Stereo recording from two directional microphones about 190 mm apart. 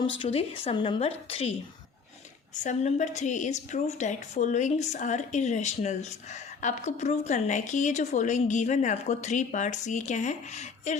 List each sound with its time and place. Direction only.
0.0 s a woman's voice: 25° left (ahead or behind)
2.6 s a woman's voice: 40° left (ahead or behind)